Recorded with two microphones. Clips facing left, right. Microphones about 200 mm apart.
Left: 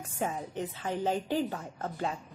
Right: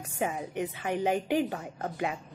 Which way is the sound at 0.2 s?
10° right (ahead or behind).